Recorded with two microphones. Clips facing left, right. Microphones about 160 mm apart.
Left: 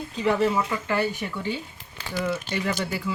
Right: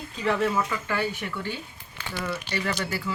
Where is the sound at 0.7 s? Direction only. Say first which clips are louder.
Left 3 dB; 15° left (ahead or behind).